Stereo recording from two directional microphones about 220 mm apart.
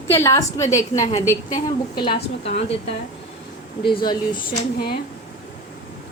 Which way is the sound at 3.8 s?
20° left (ahead or behind).